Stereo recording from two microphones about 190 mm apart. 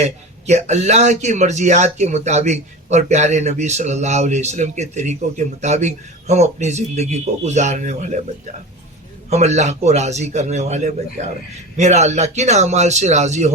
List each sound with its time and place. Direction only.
0.0 s a man's voice: 35° right (ahead or behind)
9.3 s a man's voice: 35° right (ahead or behind)